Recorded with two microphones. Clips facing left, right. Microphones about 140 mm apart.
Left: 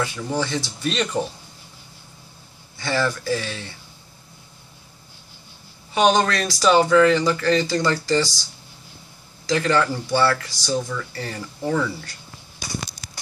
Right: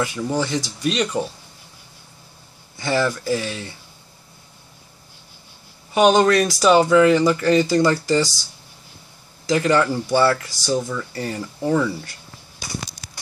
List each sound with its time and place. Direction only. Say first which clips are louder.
0.0 s speech: right 2 dB; 15° right (ahead or behind)
2.8 s speech: right 2 dB; 15° right (ahead or behind)
5.9 s speech: right 4 dB; 20° right (ahead or behind)
9.5 s speech: right 2 dB; 15° right (ahead or behind)